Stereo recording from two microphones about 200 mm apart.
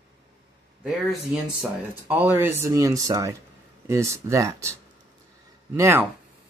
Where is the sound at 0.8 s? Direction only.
5° right (ahead or behind).